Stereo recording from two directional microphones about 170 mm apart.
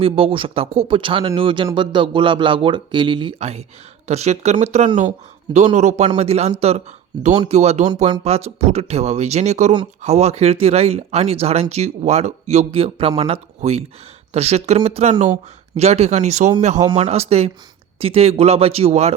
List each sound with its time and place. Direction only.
0.0 s speech: 35° right (ahead or behind)